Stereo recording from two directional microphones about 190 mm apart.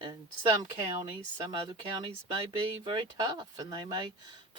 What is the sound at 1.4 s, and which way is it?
Speech, 20° right (ahead or behind).